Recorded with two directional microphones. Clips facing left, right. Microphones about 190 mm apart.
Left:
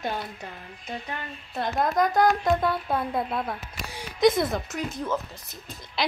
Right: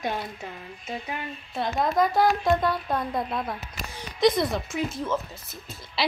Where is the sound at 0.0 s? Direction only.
5° right (ahead or behind).